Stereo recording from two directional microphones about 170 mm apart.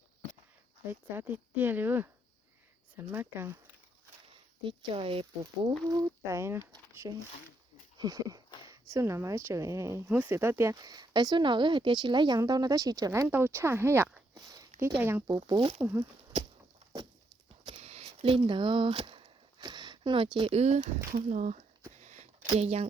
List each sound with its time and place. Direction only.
0.9 s speech: 10° right (ahead or behind)
4.6 s speech: 30° right (ahead or behind)
5.6 s speech: 20° right (ahead or behind)
7.9 s a sound: 20° right (ahead or behind)
8.9 s speech: 15° right (ahead or behind)
14.3 s a sound: 20° right (ahead or behind)
14.8 s speech: 15° right (ahead or behind)
15.3 s speech: 25° right (ahead or behind)
15.8 s speech: 15° right (ahead or behind)
17.7 s a sound: 35° right (ahead or behind)
21.2 s speech: 45° right (ahead or behind)
22.0 s a sound: 45° right (ahead or behind)
22.5 s speech: 35° right (ahead or behind)